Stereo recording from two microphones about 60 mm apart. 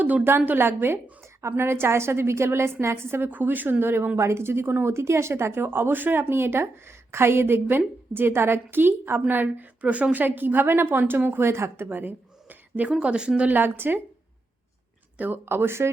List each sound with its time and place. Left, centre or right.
0.0 s a woman's voice: right
3.2 s speech: right
4.2 s speech: right
11.9 s a sound: right
12.9 s speech: centre
13.6 s speech: right
15.2 s speech: right